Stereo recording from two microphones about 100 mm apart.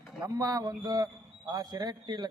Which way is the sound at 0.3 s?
35° right (ahead or behind).